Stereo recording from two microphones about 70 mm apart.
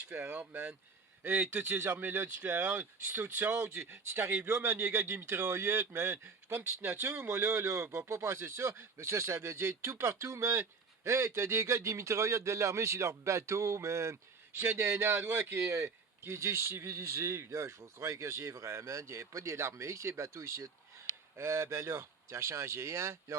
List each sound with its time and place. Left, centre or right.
0.1 s speech: right
2.0 s speech: right